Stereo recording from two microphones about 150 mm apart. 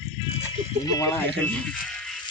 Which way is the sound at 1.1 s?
10° left (ahead or behind).